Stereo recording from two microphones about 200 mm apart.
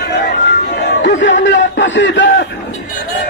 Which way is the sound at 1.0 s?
65° left (ahead or behind).